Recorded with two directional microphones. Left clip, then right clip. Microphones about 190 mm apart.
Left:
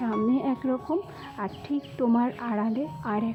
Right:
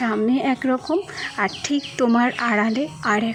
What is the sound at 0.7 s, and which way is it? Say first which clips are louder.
Speech: right 7 dB; 30° right (ahead or behind).